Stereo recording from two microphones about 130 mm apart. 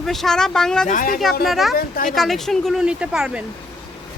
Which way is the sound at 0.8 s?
80° left.